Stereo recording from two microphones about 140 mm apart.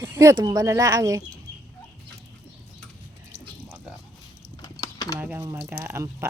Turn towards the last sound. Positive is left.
turn(degrees=-15)  # may be behind; listen again after turning